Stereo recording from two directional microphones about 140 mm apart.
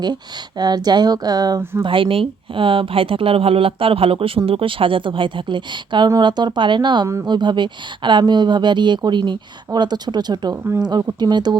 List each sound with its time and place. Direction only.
0.6 s speech: 30° right (ahead or behind)
1.8 s speech: 40° right (ahead or behind)